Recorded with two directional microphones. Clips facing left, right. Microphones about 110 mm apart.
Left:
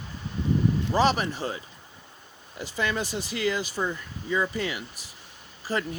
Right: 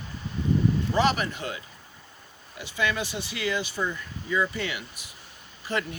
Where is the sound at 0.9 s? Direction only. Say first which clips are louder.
Left 3 dB; 35° left (ahead or behind).